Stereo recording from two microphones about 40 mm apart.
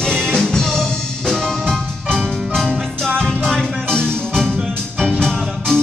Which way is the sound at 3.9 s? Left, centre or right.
Centre.